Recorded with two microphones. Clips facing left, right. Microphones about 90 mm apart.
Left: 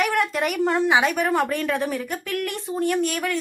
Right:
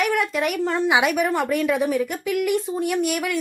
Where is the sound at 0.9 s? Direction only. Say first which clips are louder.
Even; 10° right (ahead or behind).